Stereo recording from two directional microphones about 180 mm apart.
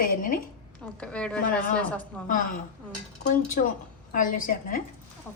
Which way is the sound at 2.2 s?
50° left (ahead or behind).